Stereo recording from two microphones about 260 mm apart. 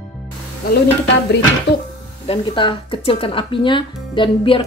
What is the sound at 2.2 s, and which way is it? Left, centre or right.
Speech, left.